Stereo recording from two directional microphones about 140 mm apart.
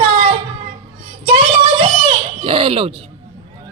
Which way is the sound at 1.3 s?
40° right (ahead or behind).